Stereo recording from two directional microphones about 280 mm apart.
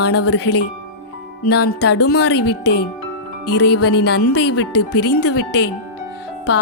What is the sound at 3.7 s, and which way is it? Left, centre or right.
Music, left.